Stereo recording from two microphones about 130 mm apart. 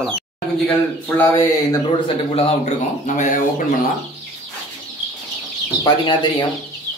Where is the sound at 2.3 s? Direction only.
50° left (ahead or behind); by 3.4 s 75° left (ahead or behind).